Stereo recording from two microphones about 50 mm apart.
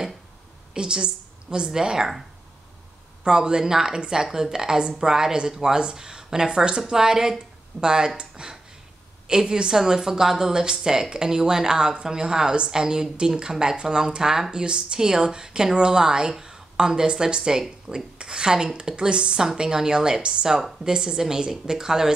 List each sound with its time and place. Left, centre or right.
0.7 s a woman's voice: centre
3.3 s a woman's voice: centre